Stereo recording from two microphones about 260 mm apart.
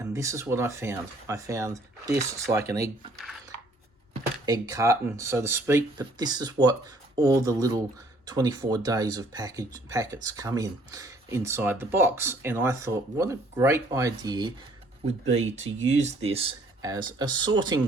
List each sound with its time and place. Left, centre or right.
0.1 s speech: centre
4.4 s speech: centre
15.6 s speech: right
16.0 s speech: right